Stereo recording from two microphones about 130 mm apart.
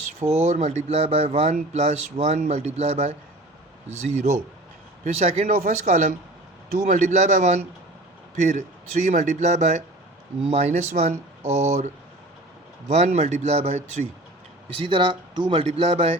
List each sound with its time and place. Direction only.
0.2 s speech: 20° right (ahead or behind)
0.4 s speech: 60° right (ahead or behind)
5.0 s speech: 55° right (ahead or behind)
5.5 s speech: 80° right; by 11.9 s 60° right (ahead or behind)
12.9 s speech: 55° right (ahead or behind)
14.8 s speech: 40° right (ahead or behind)
15.6 s speech: 50° right (ahead or behind)